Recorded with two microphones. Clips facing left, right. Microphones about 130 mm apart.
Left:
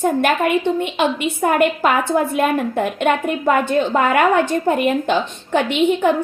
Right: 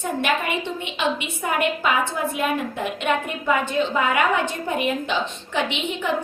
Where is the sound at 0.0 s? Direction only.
50° left (ahead or behind).